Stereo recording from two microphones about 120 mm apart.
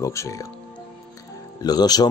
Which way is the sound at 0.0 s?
25° left (ahead or behind).